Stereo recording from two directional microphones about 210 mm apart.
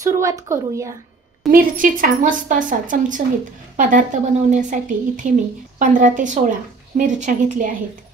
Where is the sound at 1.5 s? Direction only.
40° right (ahead or behind).